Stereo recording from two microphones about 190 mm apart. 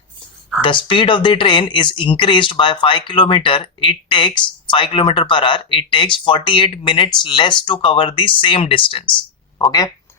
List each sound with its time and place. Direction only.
0.6 s speech: 25° left (ahead or behind)